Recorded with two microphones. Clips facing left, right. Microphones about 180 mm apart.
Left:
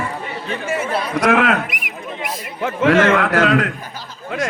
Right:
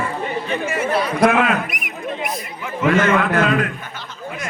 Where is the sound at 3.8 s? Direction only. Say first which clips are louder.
Left 1 dB; 35° left (ahead or behind).